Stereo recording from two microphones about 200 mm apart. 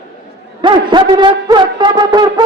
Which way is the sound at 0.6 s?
20° right (ahead or behind).